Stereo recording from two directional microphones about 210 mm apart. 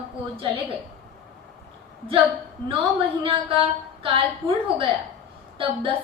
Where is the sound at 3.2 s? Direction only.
25° right (ahead or behind).